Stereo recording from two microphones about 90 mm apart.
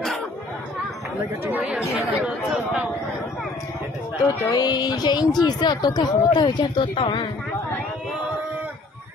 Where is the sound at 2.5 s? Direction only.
10° right (ahead or behind).